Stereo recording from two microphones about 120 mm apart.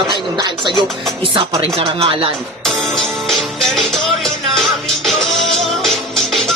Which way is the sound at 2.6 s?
Centre (ahead or behind).